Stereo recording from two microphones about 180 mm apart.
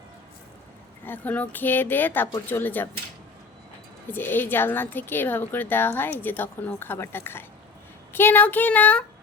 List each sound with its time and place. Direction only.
1.0 s a woman's voice: 10° left (ahead or behind)
4.1 s a woman's voice: 10° left (ahead or behind)